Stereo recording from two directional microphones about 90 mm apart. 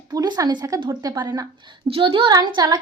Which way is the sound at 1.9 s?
80° right.